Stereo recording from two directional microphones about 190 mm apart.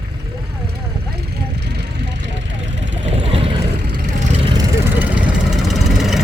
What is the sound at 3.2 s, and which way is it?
Vehicle, 30° right (ahead or behind).